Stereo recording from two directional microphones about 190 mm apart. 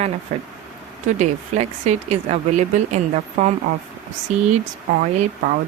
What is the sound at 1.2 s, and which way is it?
A woman's voice, 35° right (ahead or behind).